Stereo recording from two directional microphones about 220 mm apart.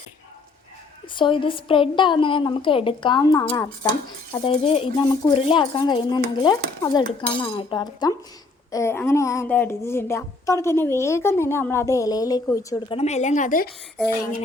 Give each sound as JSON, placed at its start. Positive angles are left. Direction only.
{"t": 1.1, "sound": "speech", "side_deg": 20}
{"t": 13.0, "sound": "a woman's voice", "side_deg": 30}